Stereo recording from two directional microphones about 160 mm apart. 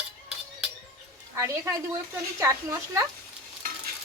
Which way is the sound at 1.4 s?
15° right (ahead or behind).